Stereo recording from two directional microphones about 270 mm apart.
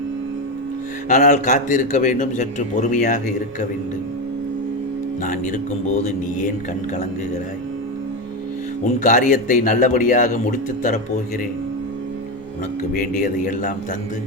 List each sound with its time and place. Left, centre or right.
1.0 s a man's voice: left
5.2 s a man's voice: left
9.0 s a man's voice: left
12.9 s a man's voice: left